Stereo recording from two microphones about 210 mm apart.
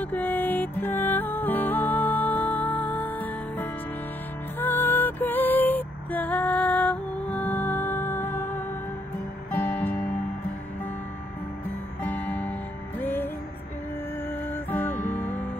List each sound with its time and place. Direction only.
0.0 s music: 10° left (ahead or behind)
12.0 s music: 10° left (ahead or behind)
14.5 s music: 10° left (ahead or behind)